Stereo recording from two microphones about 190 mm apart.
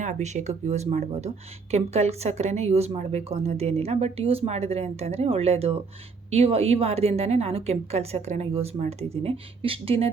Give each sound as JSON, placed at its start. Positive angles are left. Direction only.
{"t": 0.0, "sound": "speech", "side_deg": -40}